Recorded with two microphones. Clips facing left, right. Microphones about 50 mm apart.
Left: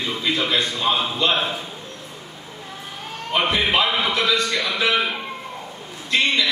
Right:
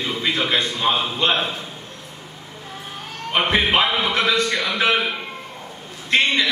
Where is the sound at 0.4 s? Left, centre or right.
Right.